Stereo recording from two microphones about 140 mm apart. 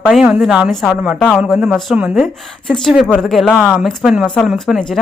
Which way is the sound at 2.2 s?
5° left (ahead or behind).